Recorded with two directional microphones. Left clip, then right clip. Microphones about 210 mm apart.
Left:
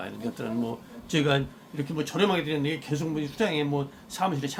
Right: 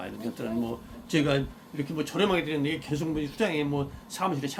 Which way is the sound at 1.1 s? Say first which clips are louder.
Left 1 dB; 10° left (ahead or behind).